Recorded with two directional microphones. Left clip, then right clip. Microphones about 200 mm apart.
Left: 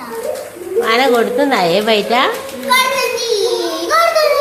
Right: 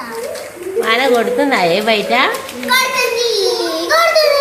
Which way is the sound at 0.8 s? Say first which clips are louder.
Left 1 dB; 10° left (ahead or behind).